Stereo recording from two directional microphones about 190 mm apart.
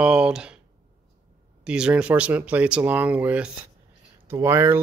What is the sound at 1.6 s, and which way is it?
Speech, 5° right (ahead or behind).